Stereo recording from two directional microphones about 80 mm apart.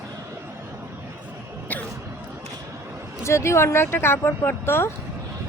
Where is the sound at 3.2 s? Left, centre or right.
Left.